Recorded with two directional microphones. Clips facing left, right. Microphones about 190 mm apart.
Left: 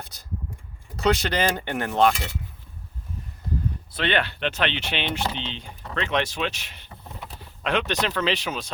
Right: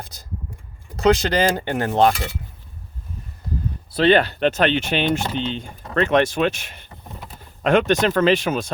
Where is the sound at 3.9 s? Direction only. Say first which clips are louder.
Right 10 dB; 35° right (ahead or behind).